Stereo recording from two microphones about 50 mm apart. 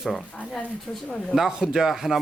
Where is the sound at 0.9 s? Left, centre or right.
Centre.